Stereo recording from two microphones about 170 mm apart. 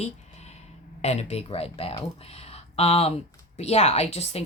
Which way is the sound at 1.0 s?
40° left (ahead or behind).